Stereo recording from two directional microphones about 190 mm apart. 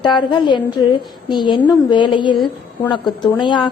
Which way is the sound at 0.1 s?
25° left (ahead or behind).